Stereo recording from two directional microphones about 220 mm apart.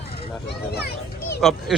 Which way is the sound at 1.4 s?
Centre (ahead or behind).